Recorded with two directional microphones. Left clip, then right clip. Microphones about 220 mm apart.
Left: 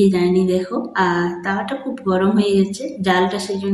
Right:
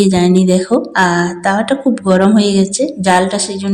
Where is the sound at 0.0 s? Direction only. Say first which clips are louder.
Right 4 dB; 40° right (ahead or behind).